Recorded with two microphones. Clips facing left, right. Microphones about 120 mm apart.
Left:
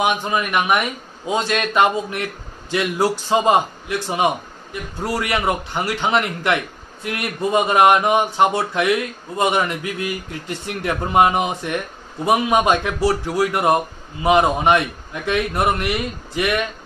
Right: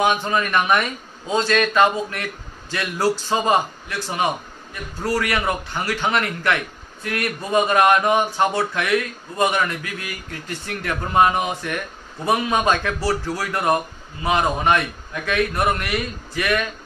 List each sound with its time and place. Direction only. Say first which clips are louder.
0.0 s a man's voice: even; 15° left (ahead or behind)
5.0 s a man's voice: left 1 dB; 20° left (ahead or behind)